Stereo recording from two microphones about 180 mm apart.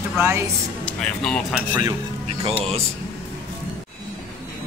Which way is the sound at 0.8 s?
5° left (ahead or behind).